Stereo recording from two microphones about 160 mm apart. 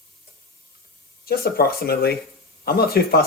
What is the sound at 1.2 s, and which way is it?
Speech, 70° left (ahead or behind).